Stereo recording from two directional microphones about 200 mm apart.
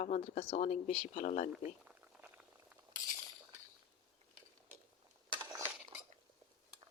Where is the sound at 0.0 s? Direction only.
35° left (ahead or behind).